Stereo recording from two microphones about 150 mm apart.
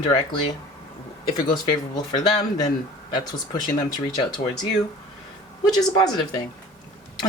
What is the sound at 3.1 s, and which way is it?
Speech, 30° left (ahead or behind).